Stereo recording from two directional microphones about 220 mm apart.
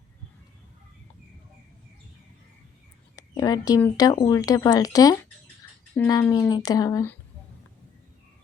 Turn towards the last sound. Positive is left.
turn(degrees=15)  # may be behind; listen again after turning